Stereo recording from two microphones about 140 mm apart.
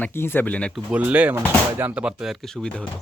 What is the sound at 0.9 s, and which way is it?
Speech, 10° right (ahead or behind).